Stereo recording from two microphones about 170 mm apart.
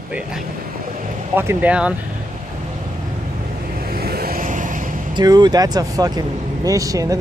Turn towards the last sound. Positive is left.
turn(degrees=-20)  # may be behind; listen again after turning